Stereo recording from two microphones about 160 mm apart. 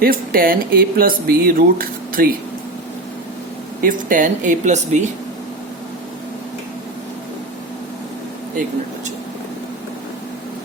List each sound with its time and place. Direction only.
0.0 s speech: 65° right (ahead or behind)
3.8 s speech: 55° right (ahead or behind)